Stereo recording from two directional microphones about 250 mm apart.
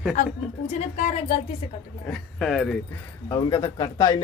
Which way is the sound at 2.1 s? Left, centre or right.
Centre.